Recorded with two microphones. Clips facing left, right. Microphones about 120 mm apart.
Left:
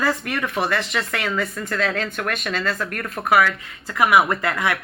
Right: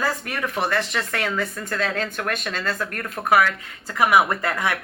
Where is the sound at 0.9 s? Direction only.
30° right (ahead or behind).